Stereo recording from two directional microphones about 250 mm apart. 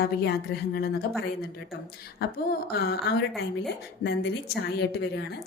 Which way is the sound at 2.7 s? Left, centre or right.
Left.